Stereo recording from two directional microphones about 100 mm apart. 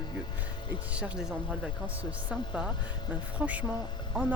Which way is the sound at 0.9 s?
10° right (ahead or behind).